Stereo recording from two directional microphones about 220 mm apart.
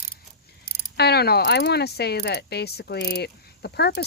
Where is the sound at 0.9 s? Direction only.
50° left (ahead or behind).